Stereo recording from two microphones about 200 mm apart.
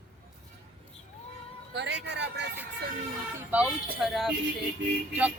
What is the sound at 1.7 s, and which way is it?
Speech, 60° right (ahead or behind).